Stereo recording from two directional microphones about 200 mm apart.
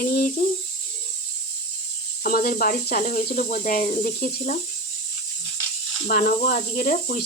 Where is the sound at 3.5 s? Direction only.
40° left (ahead or behind).